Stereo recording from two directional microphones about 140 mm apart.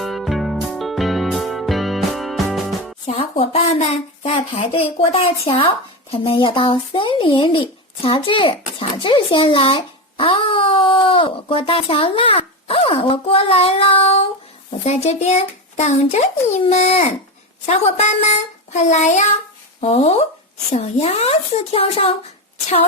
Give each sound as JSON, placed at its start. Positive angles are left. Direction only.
{"t": 0.0, "sound": "music", "side_deg": 0}
{"t": 3.1, "sound": "a sound", "side_deg": 50}
{"t": 6.1, "sound": "a child's voice", "side_deg": 40}